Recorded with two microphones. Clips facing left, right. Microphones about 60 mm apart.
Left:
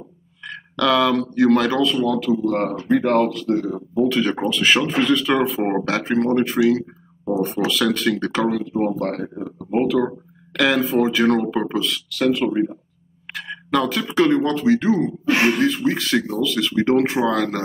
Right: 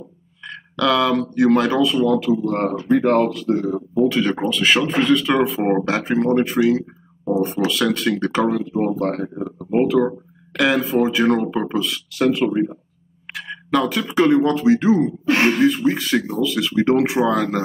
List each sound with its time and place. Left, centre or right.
0.5 s speech: centre
12.4 s speech: centre
15.0 s speech: centre